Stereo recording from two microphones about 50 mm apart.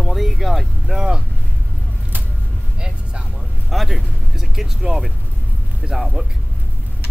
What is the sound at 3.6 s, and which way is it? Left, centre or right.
Speech, centre.